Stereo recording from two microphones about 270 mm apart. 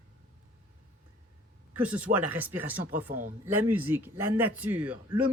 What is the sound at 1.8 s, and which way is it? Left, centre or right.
Speech, centre.